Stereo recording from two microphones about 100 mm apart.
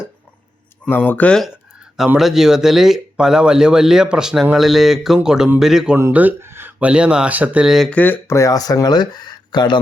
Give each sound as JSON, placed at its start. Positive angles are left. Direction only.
{"t": 0.9, "sound": "speech", "side_deg": 20}
{"t": 2.1, "sound": "speech", "side_deg": -5}
{"t": 6.1, "sound": "a sound", "side_deg": -20}
{"t": 6.7, "sound": "speech", "side_deg": -10}
{"t": 7.9, "sound": "speech", "side_deg": 15}
{"t": 8.4, "sound": "speech", "side_deg": 35}